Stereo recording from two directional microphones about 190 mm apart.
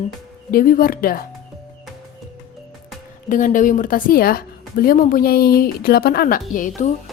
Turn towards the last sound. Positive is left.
turn(degrees=45)  # may be behind; listen again after turning